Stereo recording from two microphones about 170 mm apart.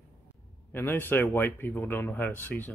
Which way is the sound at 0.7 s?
10° left (ahead or behind).